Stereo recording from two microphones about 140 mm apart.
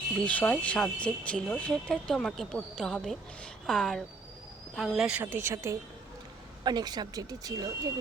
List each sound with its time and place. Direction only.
0.3 s speech: 10° left (ahead or behind)
5.2 s speech: 20° right (ahead or behind)
6.7 s speech: 30° right (ahead or behind)